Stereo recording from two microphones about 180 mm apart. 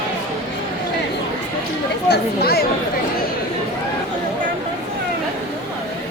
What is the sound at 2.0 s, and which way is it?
Speech, 65° left (ahead or behind).